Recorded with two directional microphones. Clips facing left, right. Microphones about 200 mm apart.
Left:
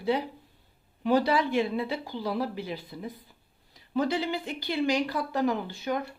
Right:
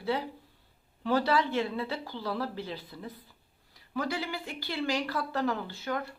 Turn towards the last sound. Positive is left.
turn(degrees=15)  # may be behind; listen again after turning